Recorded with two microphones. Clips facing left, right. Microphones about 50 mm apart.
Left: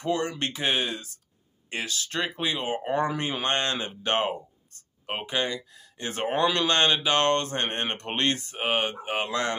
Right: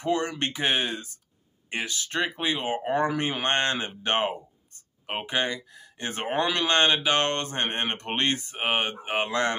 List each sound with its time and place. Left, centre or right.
0.0 s speech: right